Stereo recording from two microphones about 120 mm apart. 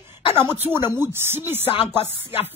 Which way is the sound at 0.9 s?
20° right (ahead or behind).